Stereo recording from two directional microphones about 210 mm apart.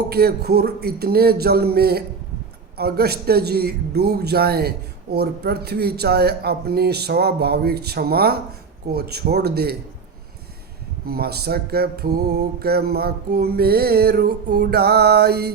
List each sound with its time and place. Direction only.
0.1 s mantra: 45° right (ahead or behind)
11.0 s mantra: 45° right (ahead or behind)